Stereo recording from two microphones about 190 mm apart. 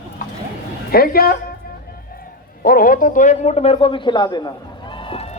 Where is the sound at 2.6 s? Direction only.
50° left (ahead or behind).